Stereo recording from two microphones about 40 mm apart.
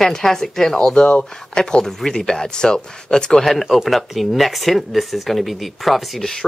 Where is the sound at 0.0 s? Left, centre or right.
Centre.